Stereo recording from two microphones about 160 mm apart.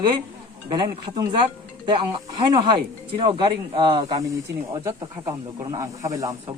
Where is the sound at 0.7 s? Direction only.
30° right (ahead or behind).